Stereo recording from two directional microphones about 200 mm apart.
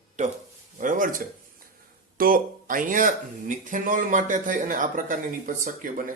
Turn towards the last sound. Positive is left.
turn(degrees=-45)  # may be behind; listen again after turning